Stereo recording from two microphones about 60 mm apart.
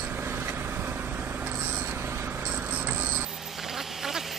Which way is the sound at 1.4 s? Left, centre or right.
Right.